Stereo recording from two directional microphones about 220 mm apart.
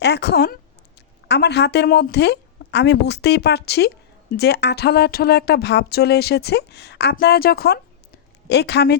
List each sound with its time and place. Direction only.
0.0 s a woman's voice: 50° left (ahead or behind)